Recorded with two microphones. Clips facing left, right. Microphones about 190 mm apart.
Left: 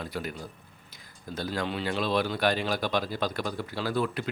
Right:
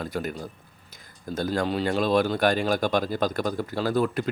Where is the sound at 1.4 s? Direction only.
45° right (ahead or behind).